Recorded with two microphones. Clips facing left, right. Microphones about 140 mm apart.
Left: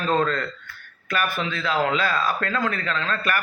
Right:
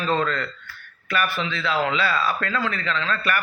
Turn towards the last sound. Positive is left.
turn(degrees=40)  # may be behind; listen again after turning